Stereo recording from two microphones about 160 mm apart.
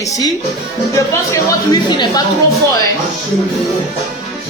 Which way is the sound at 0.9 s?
20° left (ahead or behind).